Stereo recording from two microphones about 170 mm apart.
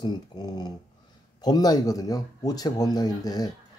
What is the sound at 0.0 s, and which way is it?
Speech, 25° left (ahead or behind).